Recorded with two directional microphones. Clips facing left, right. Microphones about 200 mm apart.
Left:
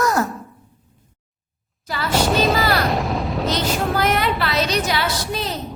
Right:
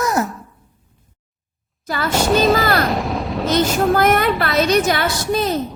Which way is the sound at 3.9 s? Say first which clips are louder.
Right 4 dB; 50° right (ahead or behind).